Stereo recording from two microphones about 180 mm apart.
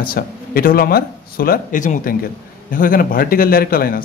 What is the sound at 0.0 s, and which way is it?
Speech, 55° left (ahead or behind).